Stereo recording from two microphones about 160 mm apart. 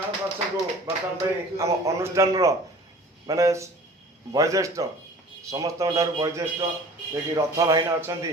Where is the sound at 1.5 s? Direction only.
20° right (ahead or behind).